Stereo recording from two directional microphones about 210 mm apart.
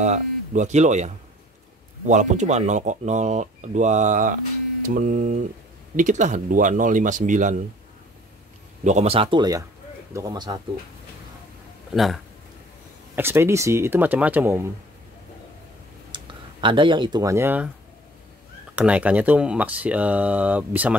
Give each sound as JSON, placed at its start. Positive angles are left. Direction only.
{"t": 0.0, "sound": "speech", "side_deg": -35}
{"t": 8.8, "sound": "speech", "side_deg": -30}
{"t": 11.9, "sound": "a man's voice", "side_deg": 0}
{"t": 13.1, "sound": "speech", "side_deg": -10}
{"t": 16.1, "sound": "speech", "side_deg": -25}
{"t": 18.8, "sound": "speech", "side_deg": -5}